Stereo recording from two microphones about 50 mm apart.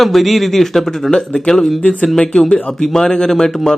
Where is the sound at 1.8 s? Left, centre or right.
Left.